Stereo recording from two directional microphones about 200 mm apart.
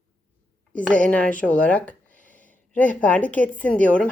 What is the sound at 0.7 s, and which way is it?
Speech, 5° left (ahead or behind).